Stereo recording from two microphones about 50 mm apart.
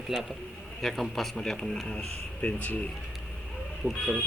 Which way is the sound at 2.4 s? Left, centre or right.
Left.